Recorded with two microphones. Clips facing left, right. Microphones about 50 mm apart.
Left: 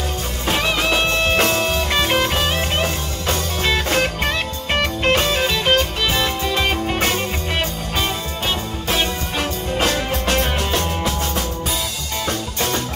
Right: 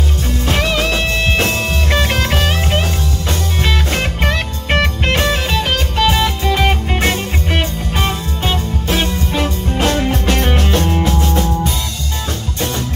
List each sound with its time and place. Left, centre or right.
0.5 s music: right
0.8 s music: left
1.9 s music: right
3.6 s music: right
9.8 s music: right